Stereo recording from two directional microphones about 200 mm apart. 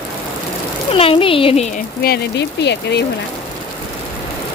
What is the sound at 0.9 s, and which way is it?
Speech, 30° left (ahead or behind).